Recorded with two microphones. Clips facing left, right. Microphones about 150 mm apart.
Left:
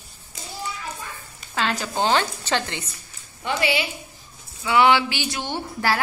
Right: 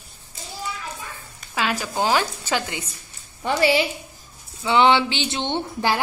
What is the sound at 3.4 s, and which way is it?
Speech, 35° right (ahead or behind).